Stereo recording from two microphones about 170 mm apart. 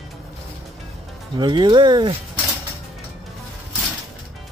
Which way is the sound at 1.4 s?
25° right (ahead or behind).